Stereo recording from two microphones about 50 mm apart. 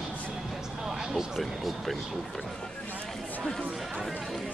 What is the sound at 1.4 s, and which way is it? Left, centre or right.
Speech, centre.